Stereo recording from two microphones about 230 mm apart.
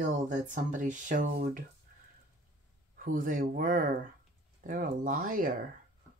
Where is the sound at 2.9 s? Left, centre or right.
Right.